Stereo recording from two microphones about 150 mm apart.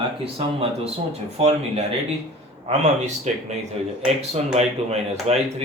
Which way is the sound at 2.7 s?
50° right (ahead or behind).